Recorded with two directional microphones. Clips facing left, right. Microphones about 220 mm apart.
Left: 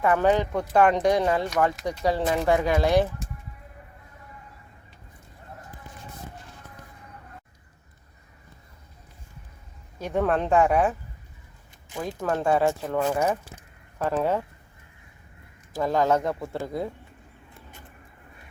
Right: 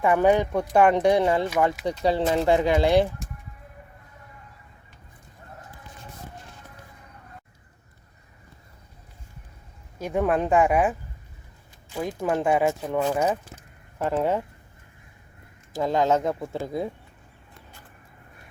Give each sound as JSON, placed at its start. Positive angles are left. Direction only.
{"t": 0.0, "sound": "speech", "side_deg": -15}
{"t": 2.0, "sound": "speech", "side_deg": -20}
{"t": 10.0, "sound": "speech", "side_deg": -10}
{"t": 11.9, "sound": "speech", "side_deg": -15}
{"t": 15.7, "sound": "speech", "side_deg": -20}